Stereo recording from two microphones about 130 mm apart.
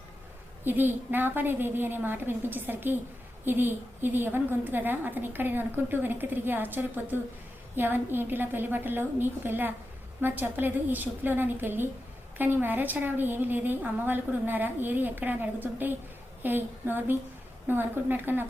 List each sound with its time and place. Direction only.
0.6 s a woman's voice: 15° right (ahead or behind)